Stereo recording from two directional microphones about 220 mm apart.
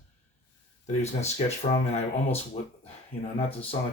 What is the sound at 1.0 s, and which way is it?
Speech, 30° left (ahead or behind).